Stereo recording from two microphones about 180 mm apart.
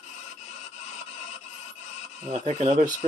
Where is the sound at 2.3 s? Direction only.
40° right (ahead or behind).